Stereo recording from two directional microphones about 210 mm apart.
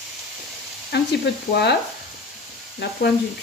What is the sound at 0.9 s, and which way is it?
Sizzle, 50° left (ahead or behind).